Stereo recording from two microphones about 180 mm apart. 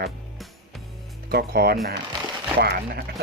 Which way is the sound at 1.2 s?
60° right (ahead or behind).